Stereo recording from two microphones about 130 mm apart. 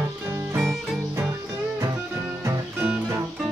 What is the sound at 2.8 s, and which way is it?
Music, 10° right (ahead or behind).